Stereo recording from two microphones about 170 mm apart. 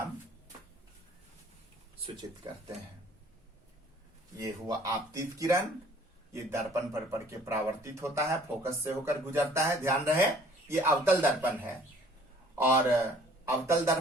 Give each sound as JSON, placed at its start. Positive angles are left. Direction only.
{"t": 2.4, "sound": "speech", "side_deg": -25}
{"t": 4.4, "sound": "a man's voice", "side_deg": -20}